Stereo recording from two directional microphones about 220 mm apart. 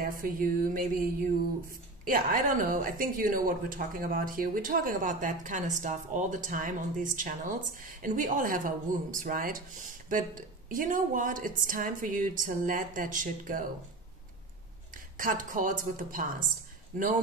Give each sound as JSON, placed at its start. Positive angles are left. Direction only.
{"t": 0.0, "sound": "a woman's voice", "side_deg": -40}
{"t": 15.1, "sound": "a woman's voice", "side_deg": -40}